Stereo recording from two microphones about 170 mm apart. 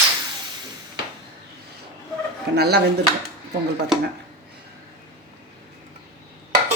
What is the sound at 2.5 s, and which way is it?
Speech, 75° right (ahead or behind).